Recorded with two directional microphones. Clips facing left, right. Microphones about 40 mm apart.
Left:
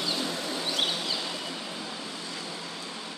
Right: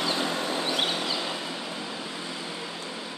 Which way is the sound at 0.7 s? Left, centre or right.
Centre.